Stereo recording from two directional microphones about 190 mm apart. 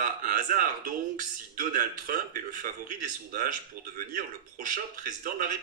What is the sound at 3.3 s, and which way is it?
Speech, 45° right (ahead or behind).